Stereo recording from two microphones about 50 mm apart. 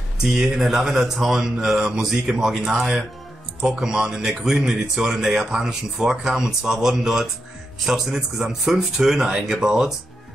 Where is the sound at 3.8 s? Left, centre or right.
Centre.